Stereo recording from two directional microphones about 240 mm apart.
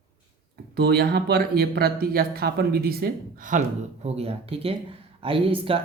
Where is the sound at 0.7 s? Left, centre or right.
Right.